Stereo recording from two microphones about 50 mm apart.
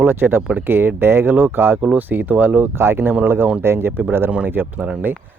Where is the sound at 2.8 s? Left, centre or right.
Right.